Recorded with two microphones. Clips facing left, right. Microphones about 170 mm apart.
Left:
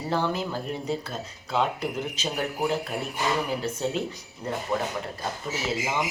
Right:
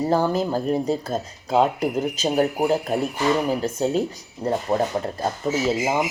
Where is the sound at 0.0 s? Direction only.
40° right (ahead or behind).